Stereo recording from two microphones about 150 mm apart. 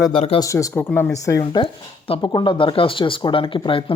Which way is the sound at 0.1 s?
40° left (ahead or behind).